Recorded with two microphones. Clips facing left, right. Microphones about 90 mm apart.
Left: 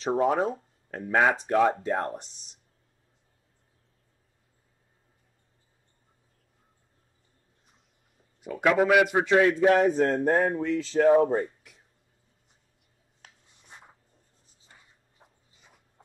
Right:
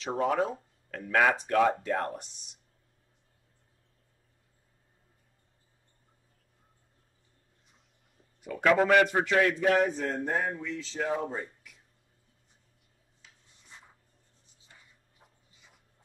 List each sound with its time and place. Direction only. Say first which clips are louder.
0.1 s speech: left 4 dB; 35° left (ahead or behind)
8.5 s speech: left 1 dB; 10° left (ahead or behind)
9.2 s speech: left 5 dB; 25° left (ahead or behind)
9.8 s speech: left 5 dB; 40° left (ahead or behind)
10.0 s speech: left 7 dB; 55° left (ahead or behind)
15.2 s a sound: left 3 dB; 25° left (ahead or behind)